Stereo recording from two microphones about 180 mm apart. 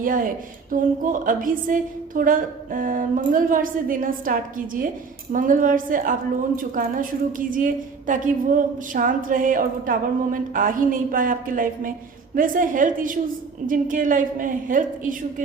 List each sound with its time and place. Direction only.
0.0 s a woman's voice: 50° right (ahead or behind)